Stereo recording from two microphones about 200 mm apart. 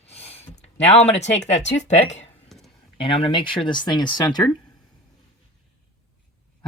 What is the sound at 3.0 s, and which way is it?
Speech, 25° left (ahead or behind).